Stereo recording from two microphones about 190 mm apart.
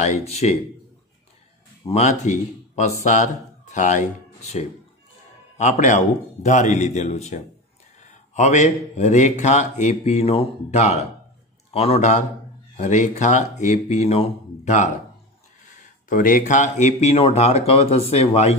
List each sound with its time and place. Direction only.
0.0 s speech: 35° left (ahead or behind)
1.9 s speech: 35° left (ahead or behind)